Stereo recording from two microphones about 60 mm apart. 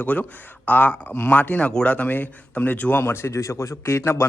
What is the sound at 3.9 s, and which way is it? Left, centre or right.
Speech, left.